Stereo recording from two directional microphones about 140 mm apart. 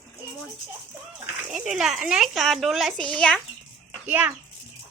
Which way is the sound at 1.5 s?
5° right (ahead or behind).